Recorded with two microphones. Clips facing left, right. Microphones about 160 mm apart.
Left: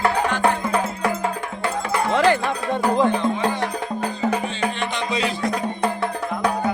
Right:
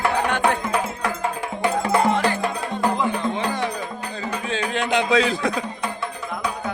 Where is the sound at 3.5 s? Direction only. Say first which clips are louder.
Left 2 dB; 55° left (ahead or behind).